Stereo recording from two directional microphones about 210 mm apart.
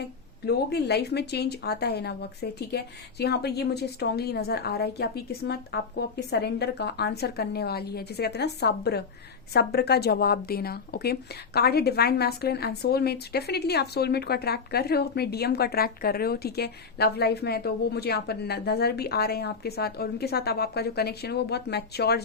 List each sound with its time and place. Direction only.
0.4 s a woman's voice: 50° left (ahead or behind)